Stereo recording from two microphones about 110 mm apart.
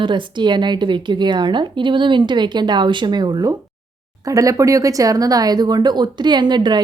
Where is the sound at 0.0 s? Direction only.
45° right (ahead or behind).